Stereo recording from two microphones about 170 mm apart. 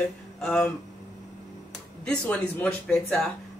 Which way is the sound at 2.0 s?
5° left (ahead or behind).